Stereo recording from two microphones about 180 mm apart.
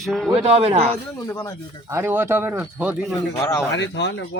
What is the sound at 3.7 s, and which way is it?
Speech, 80° left.